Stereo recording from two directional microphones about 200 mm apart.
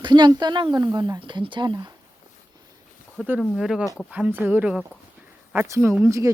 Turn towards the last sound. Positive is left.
turn(degrees=-15)  # may be behind; listen again after turning